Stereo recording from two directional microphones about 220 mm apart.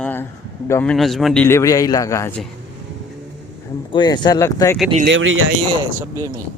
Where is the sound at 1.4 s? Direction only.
15° left (ahead or behind).